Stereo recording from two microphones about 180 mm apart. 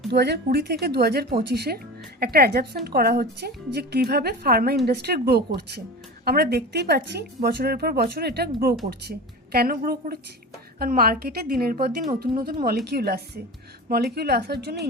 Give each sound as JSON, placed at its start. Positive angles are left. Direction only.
{"t": 0.1, "sound": "speech", "side_deg": -65}